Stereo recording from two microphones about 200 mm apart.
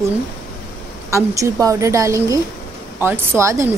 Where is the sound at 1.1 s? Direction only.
15° right (ahead or behind).